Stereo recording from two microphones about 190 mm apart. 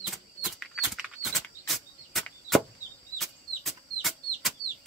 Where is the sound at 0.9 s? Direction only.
Centre (ahead or behind).